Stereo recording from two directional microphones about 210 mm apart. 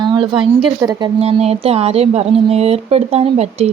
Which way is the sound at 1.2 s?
30° right (ahead or behind).